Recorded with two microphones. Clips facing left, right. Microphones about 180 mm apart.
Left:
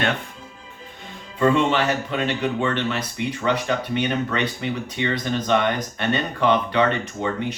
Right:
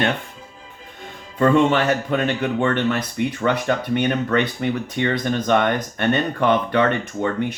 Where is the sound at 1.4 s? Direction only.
50° right (ahead or behind).